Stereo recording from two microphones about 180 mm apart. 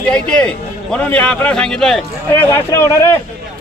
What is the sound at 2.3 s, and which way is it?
Speech, 15° left (ahead or behind).